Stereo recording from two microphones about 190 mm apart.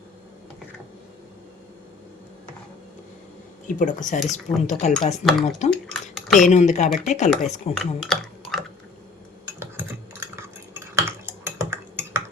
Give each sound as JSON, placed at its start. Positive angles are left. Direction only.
{"t": 3.7, "sound": "speech", "side_deg": 45}
{"t": 5.2, "sound": "speech", "side_deg": 0}
{"t": 5.9, "sound": "dishes", "side_deg": 0}
{"t": 6.4, "sound": "speech", "side_deg": 40}
{"t": 7.7, "sound": "speech", "side_deg": 5}
{"t": 9.5, "sound": "a sound", "side_deg": -15}
{"t": 10.3, "sound": "cutlery", "side_deg": -15}